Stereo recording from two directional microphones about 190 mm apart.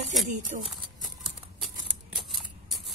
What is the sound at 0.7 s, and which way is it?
Horse, centre (ahead or behind).